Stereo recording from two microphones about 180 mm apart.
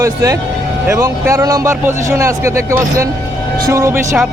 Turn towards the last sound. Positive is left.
turn(degrees=-15)  # may be behind; listen again after turning